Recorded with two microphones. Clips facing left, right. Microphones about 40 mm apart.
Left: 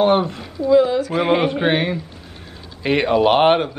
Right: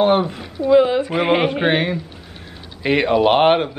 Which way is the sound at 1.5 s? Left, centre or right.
Centre.